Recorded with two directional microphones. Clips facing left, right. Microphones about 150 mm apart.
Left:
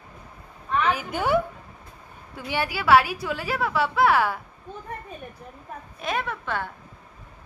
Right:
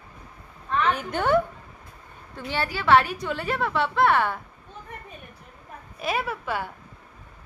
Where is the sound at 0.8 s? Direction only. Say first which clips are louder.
Right 1 dB; 5° left (ahead or behind).